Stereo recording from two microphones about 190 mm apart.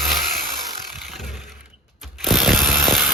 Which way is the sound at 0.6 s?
Centre (ahead or behind).